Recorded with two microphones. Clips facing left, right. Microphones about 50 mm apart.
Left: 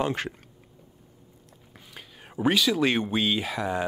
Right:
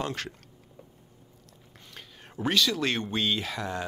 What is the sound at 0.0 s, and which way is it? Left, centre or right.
Speech, centre.